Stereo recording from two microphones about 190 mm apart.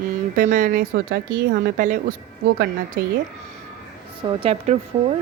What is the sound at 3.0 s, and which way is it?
Speech, 50° right (ahead or behind).